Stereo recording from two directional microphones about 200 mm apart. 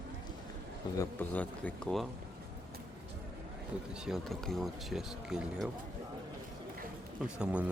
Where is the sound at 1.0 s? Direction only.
10° left (ahead or behind).